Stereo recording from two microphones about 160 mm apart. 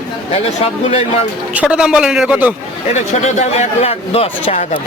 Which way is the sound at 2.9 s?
45° left (ahead or behind).